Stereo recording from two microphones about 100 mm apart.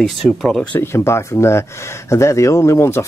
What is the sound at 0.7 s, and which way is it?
Speech, 25° left (ahead or behind).